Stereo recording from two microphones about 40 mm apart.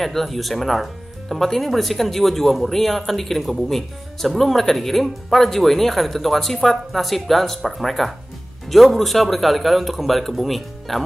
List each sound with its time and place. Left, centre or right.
0.0 s speech: centre